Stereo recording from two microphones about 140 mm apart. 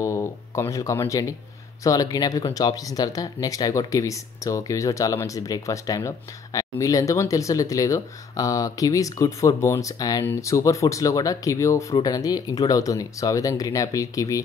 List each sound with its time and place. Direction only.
0.0 s speech: 20° left (ahead or behind)